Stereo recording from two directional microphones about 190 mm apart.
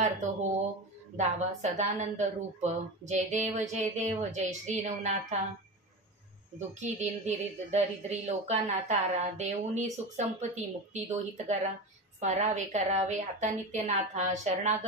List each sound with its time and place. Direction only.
0.0 s speech: 40° right (ahead or behind)
6.7 s speech: 40° right (ahead or behind)